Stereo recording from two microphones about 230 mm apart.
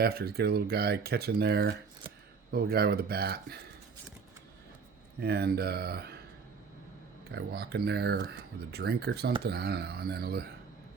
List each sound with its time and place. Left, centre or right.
0.0 s speech: right
5.2 s speech: right
7.3 s speech: right